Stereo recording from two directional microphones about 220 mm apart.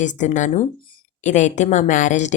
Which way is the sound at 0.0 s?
35° left (ahead or behind).